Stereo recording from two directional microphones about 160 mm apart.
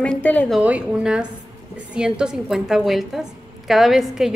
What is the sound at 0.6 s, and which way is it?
A woman's voice, 10° right (ahead or behind).